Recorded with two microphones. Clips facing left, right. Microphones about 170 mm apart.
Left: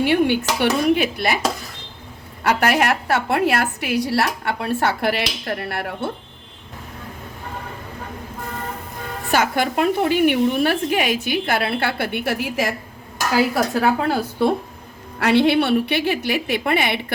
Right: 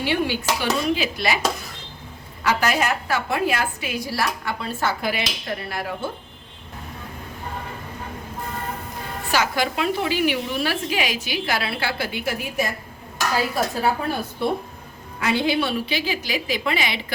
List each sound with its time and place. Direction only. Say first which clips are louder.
0.0 s a woman's voice: left 6 dB; 55° left (ahead or behind)
2.4 s a woman's voice: left 3 dB; 55° left (ahead or behind)
9.3 s a woman's voice: left 3 dB; 50° left (ahead or behind); by 12.7 s 90° left
13.8 s a woman's voice: left 4 dB; 90° left
15.2 s a woman's voice: left 6 dB; 70° left (ahead or behind)